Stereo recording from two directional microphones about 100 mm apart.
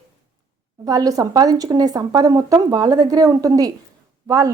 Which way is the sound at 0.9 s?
35° right (ahead or behind).